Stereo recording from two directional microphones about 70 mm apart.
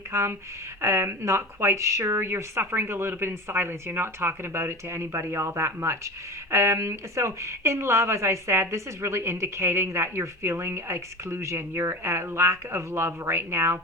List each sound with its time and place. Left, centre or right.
0.1 s speech: right